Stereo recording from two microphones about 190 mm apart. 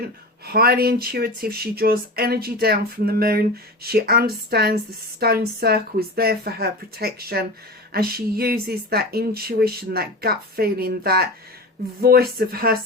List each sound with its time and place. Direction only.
0.4 s speech: 55° right (ahead or behind)